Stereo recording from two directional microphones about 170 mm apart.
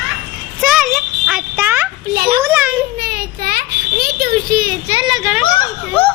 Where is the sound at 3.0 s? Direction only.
60° right (ahead or behind).